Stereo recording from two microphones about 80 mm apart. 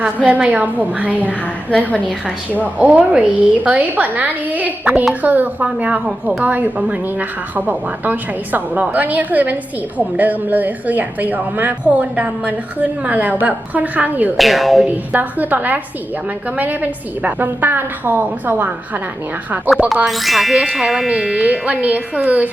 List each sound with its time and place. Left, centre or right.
0.0 s a woman's voice: centre
1.2 s a woman's voice: centre
2.6 s a woman's voice: centre
14.3 s speech: centre
15.1 s a woman's voice: right
20.1 s speech: centre
21.1 s a woman's voice: centre